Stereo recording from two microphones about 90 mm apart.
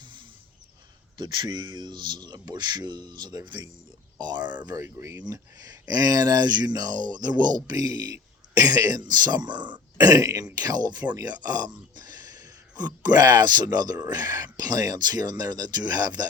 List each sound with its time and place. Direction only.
0.0 s a sound: 65° right (ahead or behind)
1.1 s speech: 55° right (ahead or behind)
4.8 s speech: 35° right (ahead or behind); by 16.2 s 50° right (ahead or behind)